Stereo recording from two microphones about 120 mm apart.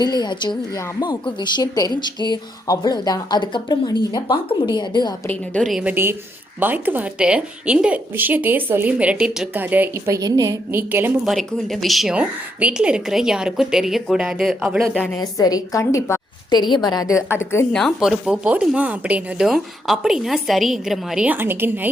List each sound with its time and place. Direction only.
0.0 s speech: 35° left (ahead or behind)
5.8 s a woman's voice: 20° right (ahead or behind)
9.6 s a woman's voice: 15° right (ahead or behind)
11.3 s speech: 5° left (ahead or behind)
15.2 s a woman's voice: 30° left (ahead or behind)
16.5 s a woman's voice: 35° left (ahead or behind); by 17.7 s 20° left (ahead or behind)
17.7 s speech: 5° left (ahead or behind)
21.2 s a woman's voice: 20° right (ahead or behind)